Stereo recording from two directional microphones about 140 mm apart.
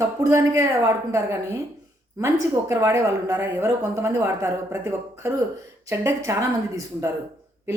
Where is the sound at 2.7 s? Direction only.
20° right (ahead or behind).